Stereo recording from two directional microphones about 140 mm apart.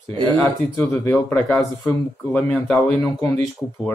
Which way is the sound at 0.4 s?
5° left (ahead or behind).